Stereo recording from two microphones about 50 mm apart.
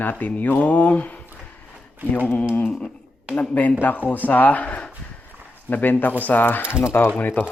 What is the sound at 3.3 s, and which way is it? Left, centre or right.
Speech, left.